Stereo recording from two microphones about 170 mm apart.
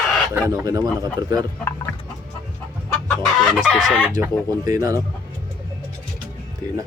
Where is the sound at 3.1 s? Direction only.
Centre (ahead or behind).